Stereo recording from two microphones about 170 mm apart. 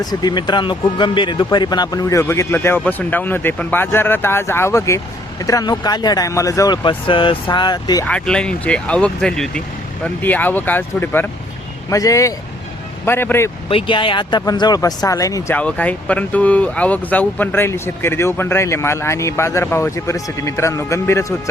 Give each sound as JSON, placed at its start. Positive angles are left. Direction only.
{"t": 0.0, "sound": "speech", "side_deg": 25}
{"t": 8.0, "sound": "speech", "side_deg": 5}
{"t": 13.7, "sound": "speech", "side_deg": 30}
{"t": 15.5, "sound": "speech", "side_deg": 10}